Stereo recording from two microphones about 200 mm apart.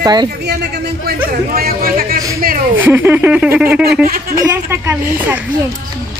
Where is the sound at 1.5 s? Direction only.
45° right (ahead or behind).